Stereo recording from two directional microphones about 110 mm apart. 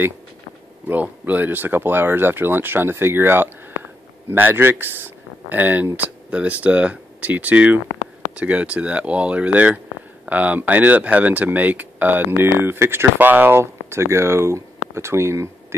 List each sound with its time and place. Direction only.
0.8 s speech: 15° right (ahead or behind)